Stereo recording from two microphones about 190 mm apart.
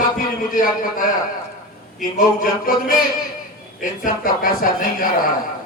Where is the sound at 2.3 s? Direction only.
45° left (ahead or behind).